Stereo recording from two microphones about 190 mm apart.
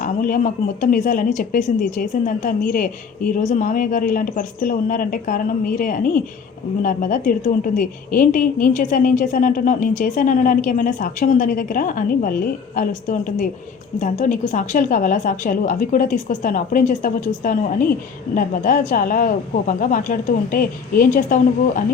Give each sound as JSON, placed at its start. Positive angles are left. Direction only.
{"t": 0.0, "sound": "a woman's voice", "side_deg": 45}